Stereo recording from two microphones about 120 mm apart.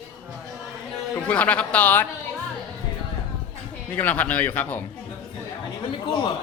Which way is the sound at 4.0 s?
15° left (ahead or behind).